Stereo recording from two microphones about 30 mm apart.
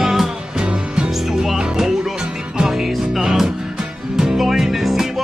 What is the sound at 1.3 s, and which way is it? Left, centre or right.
Music, centre.